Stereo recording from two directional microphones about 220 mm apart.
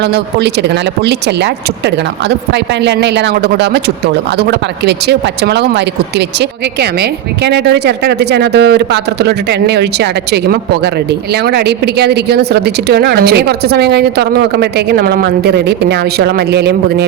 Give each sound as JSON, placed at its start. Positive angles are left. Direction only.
{"t": 0.0, "sound": "speech", "side_deg": -50}
{"t": 2.5, "sound": "speech", "side_deg": -50}